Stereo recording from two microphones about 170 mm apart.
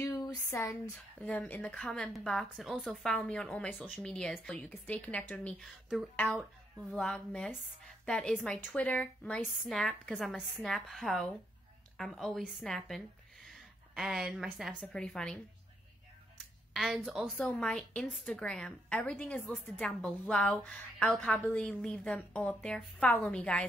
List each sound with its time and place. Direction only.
0.0 s a sound: 15° left (ahead or behind)
1.2 s a woman's voice: 10° left (ahead or behind)
6.1 s a woman's voice: 10° left (ahead or behind)
16.7 s a woman's voice: centre (ahead or behind)